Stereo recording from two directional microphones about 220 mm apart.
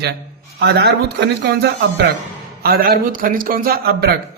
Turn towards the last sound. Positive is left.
turn(degrees=-45)  # may be behind; listen again after turning